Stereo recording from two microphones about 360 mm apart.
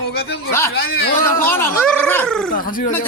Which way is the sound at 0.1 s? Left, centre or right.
Left.